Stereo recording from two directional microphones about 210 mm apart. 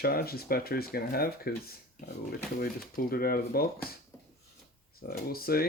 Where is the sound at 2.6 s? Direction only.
45° left (ahead or behind).